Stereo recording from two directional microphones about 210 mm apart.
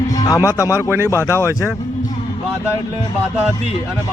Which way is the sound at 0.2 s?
15° left (ahead or behind).